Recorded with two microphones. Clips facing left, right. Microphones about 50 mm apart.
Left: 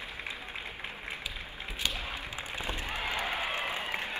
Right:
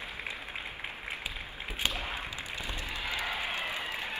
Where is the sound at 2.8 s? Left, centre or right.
Left.